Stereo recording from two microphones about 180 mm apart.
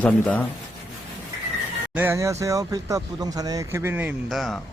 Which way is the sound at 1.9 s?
10° right (ahead or behind).